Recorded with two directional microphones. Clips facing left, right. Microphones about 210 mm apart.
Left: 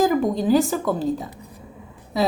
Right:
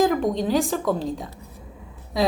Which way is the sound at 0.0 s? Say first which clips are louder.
Left 1 dB; 5° left (ahead or behind).